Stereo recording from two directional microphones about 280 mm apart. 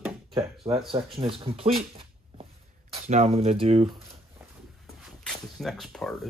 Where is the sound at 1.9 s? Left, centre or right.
Right.